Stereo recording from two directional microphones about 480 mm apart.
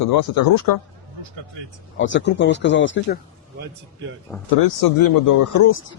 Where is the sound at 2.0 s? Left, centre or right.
Left.